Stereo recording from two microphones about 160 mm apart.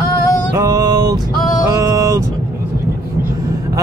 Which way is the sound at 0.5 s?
20° right (ahead or behind).